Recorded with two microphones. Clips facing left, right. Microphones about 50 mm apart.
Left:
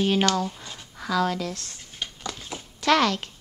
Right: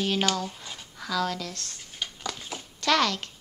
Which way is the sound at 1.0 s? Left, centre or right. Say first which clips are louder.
Left 4 dB; centre.